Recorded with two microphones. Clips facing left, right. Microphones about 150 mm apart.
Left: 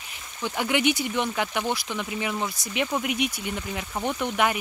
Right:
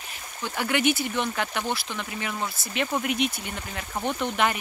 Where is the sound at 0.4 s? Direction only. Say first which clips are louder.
Left 1 dB; 15° left (ahead or behind).